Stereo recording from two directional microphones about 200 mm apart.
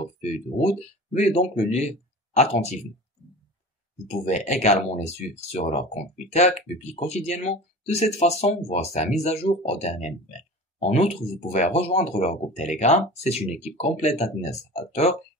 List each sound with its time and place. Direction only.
0.2 s speech: 30° left (ahead or behind)
4.1 s speech: 35° left (ahead or behind)